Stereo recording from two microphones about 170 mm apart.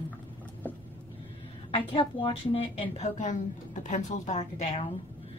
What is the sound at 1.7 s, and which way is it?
A woman's voice, 30° left (ahead or behind).